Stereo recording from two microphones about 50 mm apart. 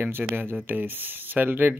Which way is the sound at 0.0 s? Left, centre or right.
Right.